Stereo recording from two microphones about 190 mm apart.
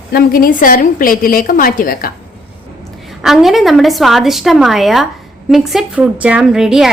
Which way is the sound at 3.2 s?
Centre (ahead or behind).